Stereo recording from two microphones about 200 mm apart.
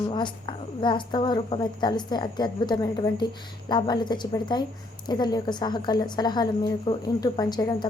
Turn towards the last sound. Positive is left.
turn(degrees=20)  # may be behind; listen again after turning